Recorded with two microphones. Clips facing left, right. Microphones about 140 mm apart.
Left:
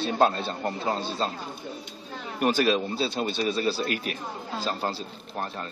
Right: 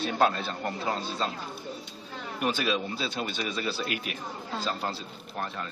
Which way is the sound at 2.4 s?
45° left (ahead or behind).